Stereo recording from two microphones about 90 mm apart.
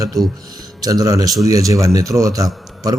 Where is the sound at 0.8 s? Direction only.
45° right (ahead or behind).